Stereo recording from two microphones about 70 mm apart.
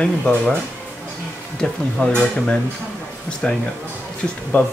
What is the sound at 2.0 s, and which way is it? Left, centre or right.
Speech, centre.